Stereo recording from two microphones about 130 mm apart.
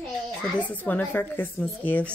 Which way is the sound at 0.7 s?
15° left (ahead or behind).